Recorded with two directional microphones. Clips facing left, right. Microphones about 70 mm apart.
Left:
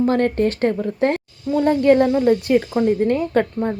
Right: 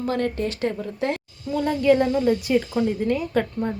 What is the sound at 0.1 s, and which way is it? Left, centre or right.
A woman's voice, left.